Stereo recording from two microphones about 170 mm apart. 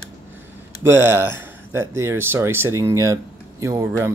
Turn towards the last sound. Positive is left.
turn(degrees=-15)  # may be behind; listen again after turning